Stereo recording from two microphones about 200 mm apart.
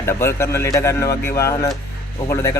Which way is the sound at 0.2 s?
15° left (ahead or behind).